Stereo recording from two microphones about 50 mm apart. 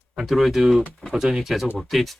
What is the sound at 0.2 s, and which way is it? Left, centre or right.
Speech, centre.